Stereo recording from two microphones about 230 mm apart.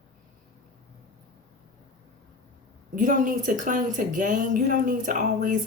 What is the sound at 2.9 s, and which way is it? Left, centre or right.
A woman's voice, right.